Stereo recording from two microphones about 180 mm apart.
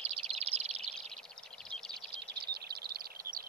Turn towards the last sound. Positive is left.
turn(degrees=-55)  # may be behind; listen again after turning